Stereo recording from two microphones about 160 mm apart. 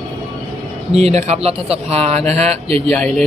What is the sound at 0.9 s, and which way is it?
Speech, 40° right (ahead or behind).